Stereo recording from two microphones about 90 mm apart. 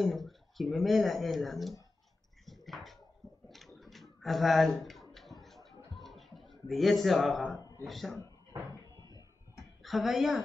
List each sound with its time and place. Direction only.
0.0 s speech: centre (ahead or behind)
2.4 s a sound: centre (ahead or behind)
7.8 s speech: centre (ahead or behind)
8.6 s cupboard open or close: 40° left (ahead or behind)
9.8 s speech: centre (ahead or behind)